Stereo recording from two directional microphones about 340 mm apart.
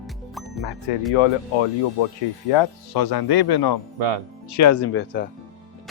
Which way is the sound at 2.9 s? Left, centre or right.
Left.